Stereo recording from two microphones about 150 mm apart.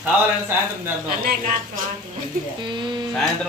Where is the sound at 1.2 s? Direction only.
80° right.